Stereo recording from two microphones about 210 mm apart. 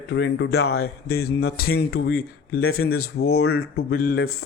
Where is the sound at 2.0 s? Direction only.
45° left (ahead or behind).